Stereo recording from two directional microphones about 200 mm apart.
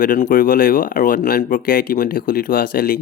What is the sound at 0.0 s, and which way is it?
Speech, 45° left (ahead or behind).